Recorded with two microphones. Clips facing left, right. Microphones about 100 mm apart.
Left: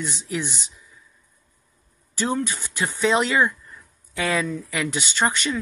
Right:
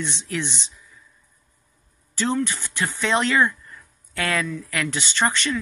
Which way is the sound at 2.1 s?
15° left (ahead or behind).